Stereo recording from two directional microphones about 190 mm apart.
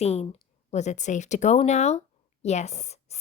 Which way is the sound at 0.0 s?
35° left (ahead or behind).